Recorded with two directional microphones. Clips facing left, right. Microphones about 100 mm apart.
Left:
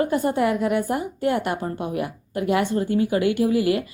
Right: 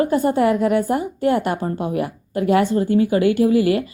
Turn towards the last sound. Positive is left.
turn(degrees=-30)  # may be behind; listen again after turning